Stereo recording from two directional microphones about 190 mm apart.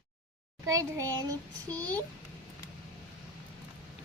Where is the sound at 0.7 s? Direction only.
20° right (ahead or behind).